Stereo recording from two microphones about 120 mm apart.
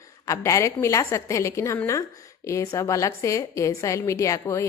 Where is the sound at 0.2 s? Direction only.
25° left (ahead or behind).